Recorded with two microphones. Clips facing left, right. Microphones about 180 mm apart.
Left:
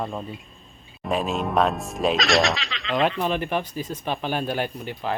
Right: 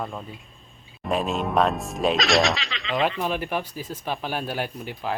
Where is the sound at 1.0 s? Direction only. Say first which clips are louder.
Even; centre (ahead or behind).